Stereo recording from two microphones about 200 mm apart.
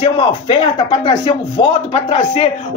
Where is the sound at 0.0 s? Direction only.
25° left (ahead or behind).